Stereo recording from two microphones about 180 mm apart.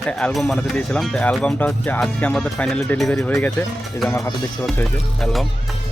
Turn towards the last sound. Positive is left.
turn(degrees=0)  # may be behind; listen again after turning